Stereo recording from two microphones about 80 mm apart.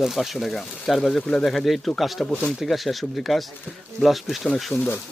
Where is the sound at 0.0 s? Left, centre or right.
Centre.